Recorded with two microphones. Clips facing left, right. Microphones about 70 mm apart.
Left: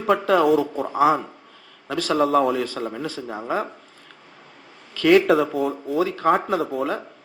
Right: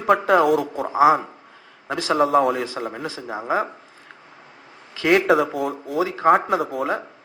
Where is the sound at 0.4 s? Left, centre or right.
Right.